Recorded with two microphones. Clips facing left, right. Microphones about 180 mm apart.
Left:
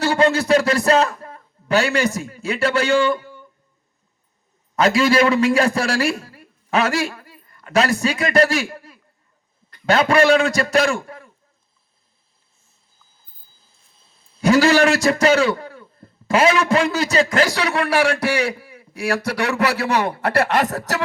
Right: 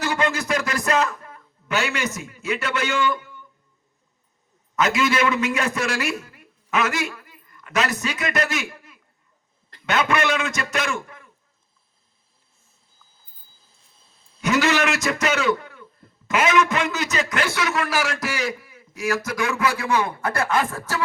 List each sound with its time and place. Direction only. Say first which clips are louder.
0.0 s a sound: left 7 dB; 30° left (ahead or behind)
0.9 s a man's voice: left 5 dB; 30° left (ahead or behind)
4.8 s a man's voice: left 5 dB; 35° left (ahead or behind)
14.4 s a man's voice: left 6 dB; 35° left (ahead or behind)
19.4 s a man's voice: left 3 dB; 70° left (ahead or behind)